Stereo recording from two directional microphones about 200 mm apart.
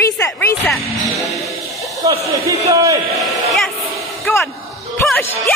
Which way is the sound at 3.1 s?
Centre (ahead or behind).